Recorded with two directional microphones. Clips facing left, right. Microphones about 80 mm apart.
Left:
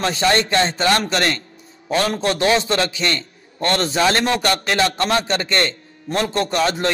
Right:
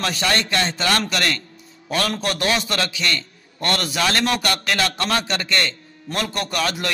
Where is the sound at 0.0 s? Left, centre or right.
Left.